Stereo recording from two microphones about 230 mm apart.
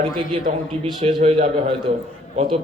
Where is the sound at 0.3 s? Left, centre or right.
Right.